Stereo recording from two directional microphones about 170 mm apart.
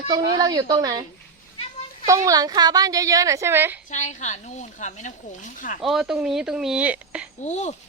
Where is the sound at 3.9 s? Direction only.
45° left (ahead or behind).